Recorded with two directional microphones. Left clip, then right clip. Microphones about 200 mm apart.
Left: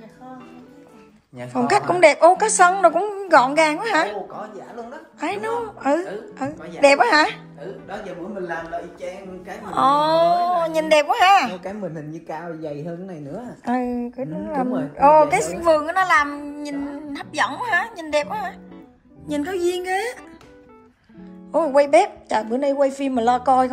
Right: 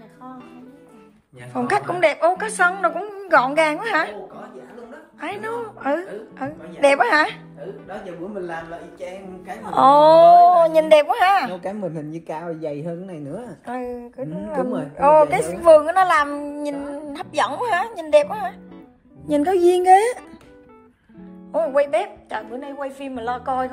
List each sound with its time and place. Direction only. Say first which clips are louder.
1.5 s a woman's voice: left 3 dB; 10° left (ahead or behind)
5.2 s a woman's voice: left 3 dB; 10° left (ahead or behind)
9.7 s speech: right 5 dB; centre (ahead or behind)
11.8 s a woman's voice: right 2 dB; 55° right (ahead or behind)
13.7 s a woman's voice: left 6 dB; 15° left (ahead or behind)
15.6 s speech: right 7 dB; centre (ahead or behind); by 20.2 s 15° right (ahead or behind)
21.5 s a woman's voice: left 3 dB; 15° left (ahead or behind)